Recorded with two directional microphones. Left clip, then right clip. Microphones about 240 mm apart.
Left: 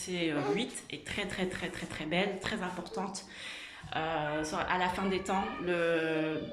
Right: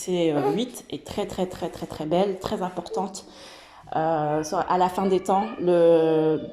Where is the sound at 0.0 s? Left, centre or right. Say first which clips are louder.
Right 10 dB; right.